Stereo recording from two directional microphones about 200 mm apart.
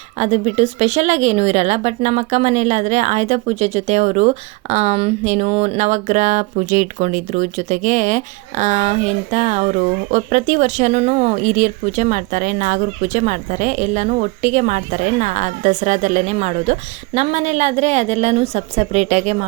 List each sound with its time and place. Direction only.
0.2 s speech: 35° right (ahead or behind)